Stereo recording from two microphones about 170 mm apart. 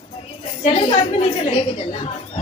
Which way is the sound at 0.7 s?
40° left (ahead or behind).